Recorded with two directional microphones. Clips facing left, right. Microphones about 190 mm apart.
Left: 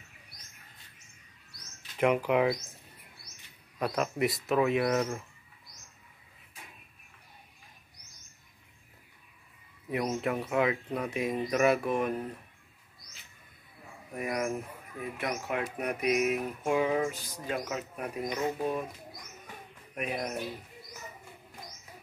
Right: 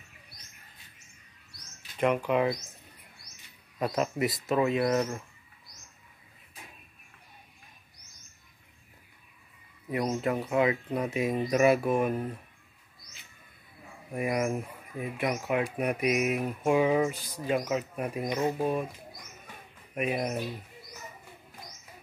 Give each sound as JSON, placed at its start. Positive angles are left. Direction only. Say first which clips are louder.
{"t": 2.0, "sound": "speech", "louder": "even", "side_deg": 10}
{"t": 3.8, "sound": "speech", "louder": "right 1 dB", "side_deg": 0}
{"t": 9.8, "sound": "speech", "louder": "right 2 dB", "side_deg": 0}
{"t": 14.1, "sound": "speech", "louder": "right 3 dB", "side_deg": -10}
{"t": 20.0, "sound": "speech", "louder": "right 4 dB", "side_deg": -10}